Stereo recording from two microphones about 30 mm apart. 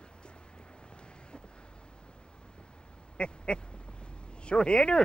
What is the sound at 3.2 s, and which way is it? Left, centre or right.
Speech, left.